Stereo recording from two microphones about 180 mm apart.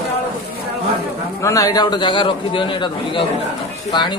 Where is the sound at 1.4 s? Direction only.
20° left (ahead or behind).